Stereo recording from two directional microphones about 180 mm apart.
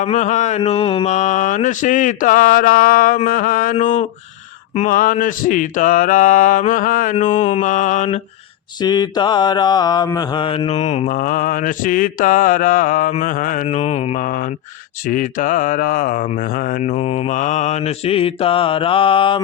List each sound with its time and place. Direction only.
0.0 s mantra: 40° left (ahead or behind)
8.8 s mantra: 25° left (ahead or behind); by 16.9 s 50° left (ahead or behind)
16.9 s mantra: 35° left (ahead or behind)